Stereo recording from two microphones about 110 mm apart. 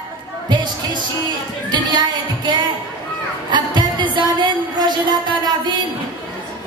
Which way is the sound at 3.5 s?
45° right (ahead or behind).